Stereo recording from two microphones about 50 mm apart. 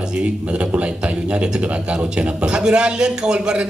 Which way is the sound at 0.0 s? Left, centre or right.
Right.